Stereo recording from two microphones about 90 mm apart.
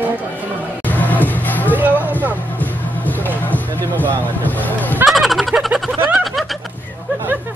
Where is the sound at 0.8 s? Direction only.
20° left (ahead or behind).